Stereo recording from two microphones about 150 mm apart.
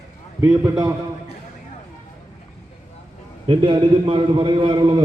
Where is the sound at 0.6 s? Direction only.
25° right (ahead or behind).